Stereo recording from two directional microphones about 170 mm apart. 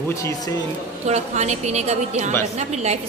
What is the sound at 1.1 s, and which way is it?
A woman's voice, 40° right (ahead or behind).